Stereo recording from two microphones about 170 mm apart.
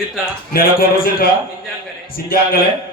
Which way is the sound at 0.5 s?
60° left (ahead or behind).